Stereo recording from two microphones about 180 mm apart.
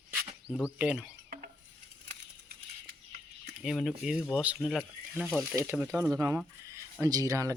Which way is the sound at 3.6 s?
Centre (ahead or behind).